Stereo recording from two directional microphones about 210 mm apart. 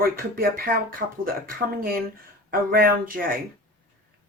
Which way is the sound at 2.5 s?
45° right (ahead or behind).